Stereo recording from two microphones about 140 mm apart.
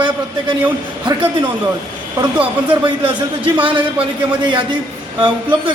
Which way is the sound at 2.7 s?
35° right (ahead or behind).